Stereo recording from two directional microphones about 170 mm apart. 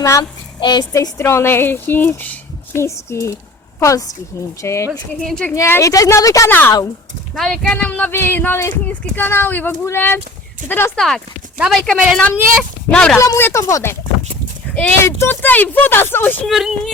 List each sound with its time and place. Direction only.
0.0 s a woman's voice: 20° left (ahead or behind)
4.9 s speech: 5° left (ahead or behind)
5.5 s a woman's voice: 15° left (ahead or behind)
7.3 s a woman's voice: 5° left (ahead or behind)
11.0 s a woman's voice: centre (ahead or behind)
13.2 s a woman's voice: 15° left (ahead or behind)
16.5 s speech: centre (ahead or behind)